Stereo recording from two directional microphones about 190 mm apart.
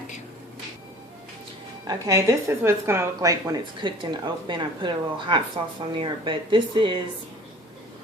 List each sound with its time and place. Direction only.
1.9 s a woman's voice: 15° right (ahead or behind)